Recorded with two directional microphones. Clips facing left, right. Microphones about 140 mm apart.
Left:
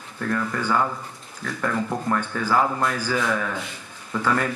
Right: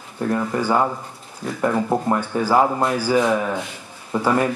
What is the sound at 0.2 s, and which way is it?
Speech, 25° right (ahead or behind).